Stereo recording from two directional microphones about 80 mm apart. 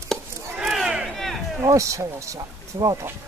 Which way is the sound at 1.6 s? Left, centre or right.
Right.